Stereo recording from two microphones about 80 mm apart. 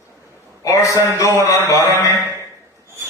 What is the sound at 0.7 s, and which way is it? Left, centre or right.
A man's voice, left.